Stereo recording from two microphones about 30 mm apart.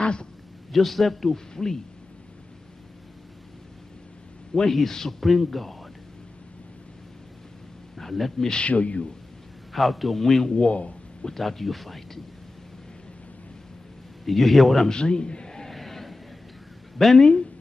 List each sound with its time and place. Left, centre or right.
0.0 s a sound: left
0.7 s speech: centre
1.3 s speech: centre
4.6 s speech: centre
7.9 s a man's voice: centre
8.6 s speech: left
9.7 s a man's voice: centre
10.2 s speech: centre
10.7 s speech: left
11.2 s speech: centre
14.2 s speech: centre
14.9 s a man's voice: left
15.7 s vehicle: centre
17.2 s speech: left